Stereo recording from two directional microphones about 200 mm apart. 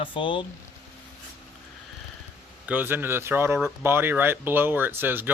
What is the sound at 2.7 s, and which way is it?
Speech, 10° right (ahead or behind).